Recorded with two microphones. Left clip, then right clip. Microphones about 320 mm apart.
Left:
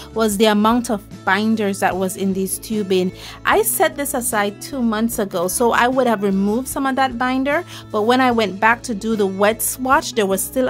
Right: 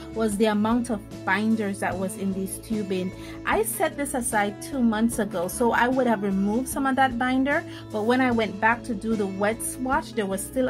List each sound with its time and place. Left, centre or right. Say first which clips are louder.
0.2 s a woman's voice: left 8 dB; left